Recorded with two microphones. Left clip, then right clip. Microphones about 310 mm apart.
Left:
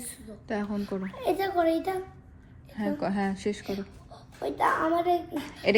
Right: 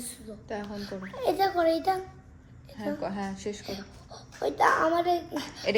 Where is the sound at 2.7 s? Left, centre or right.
Left.